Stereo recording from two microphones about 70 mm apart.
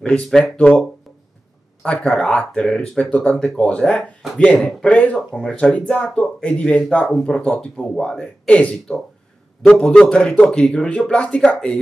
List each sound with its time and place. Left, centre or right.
0.0 s speech: centre
1.9 s speech: centre
4.8 s speech: centre